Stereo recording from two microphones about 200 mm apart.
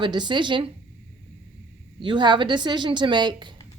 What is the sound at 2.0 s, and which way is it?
A woman's voice, 25° right (ahead or behind).